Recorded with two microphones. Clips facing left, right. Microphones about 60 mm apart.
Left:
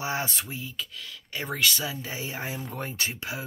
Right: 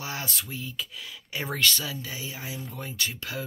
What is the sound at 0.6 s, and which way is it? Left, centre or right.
Speech, centre.